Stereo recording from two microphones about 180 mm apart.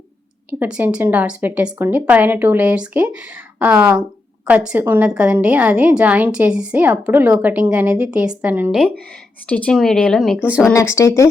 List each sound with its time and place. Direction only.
0.6 s a woman's voice: 10° right (ahead or behind)
9.5 s a woman's voice: 5° left (ahead or behind)
10.7 s speech: 15° left (ahead or behind)